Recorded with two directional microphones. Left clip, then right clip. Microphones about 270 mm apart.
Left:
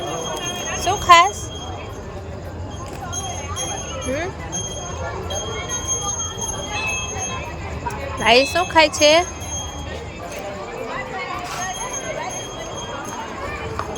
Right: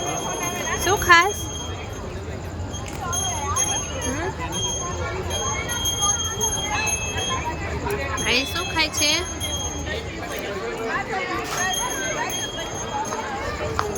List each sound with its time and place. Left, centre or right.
0.8 s speech: centre
8.2 s speech: centre